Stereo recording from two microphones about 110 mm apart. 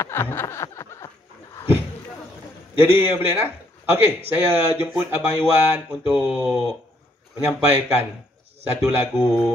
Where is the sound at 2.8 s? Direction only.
15° right (ahead or behind).